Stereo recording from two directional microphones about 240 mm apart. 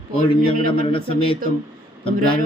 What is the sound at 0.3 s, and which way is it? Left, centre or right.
Speech, left.